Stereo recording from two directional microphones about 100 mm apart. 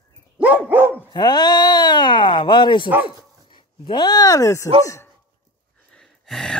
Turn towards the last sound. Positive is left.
turn(degrees=5)  # may be behind; listen again after turning